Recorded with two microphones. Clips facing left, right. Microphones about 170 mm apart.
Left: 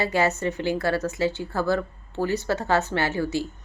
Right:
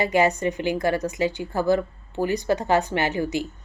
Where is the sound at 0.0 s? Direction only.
15° right (ahead or behind).